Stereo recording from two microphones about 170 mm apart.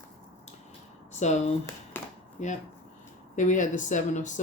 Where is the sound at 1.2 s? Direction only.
45° left (ahead or behind).